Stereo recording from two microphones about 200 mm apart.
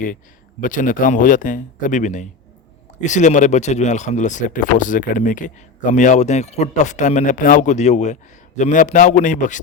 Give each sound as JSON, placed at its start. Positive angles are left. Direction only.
{"t": 0.6, "sound": "speech", "side_deg": 40}